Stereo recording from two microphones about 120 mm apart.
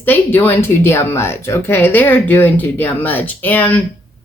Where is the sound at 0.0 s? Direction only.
15° left (ahead or behind).